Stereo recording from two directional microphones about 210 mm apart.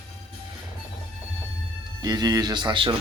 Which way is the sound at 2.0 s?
20° right (ahead or behind).